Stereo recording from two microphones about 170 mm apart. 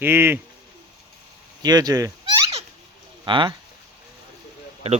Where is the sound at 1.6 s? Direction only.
25° right (ahead or behind).